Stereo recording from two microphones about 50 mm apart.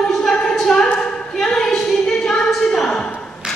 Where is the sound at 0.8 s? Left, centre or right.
Centre.